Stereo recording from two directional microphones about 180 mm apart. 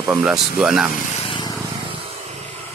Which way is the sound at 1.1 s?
30° left (ahead or behind).